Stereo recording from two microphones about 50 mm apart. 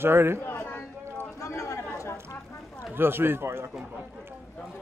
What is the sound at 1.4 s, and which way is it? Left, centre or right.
Chatter, left.